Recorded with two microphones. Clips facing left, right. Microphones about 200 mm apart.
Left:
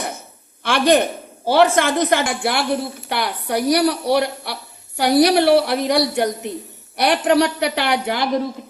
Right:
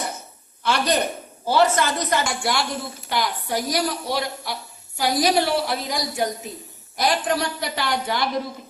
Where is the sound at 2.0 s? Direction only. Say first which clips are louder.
Left 4 dB; 60° left (ahead or behind).